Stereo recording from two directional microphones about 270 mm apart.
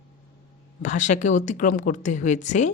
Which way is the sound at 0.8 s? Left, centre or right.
Left.